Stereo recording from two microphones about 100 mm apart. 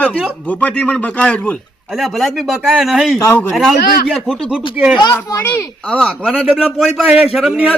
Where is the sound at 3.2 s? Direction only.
25° left (ahead or behind).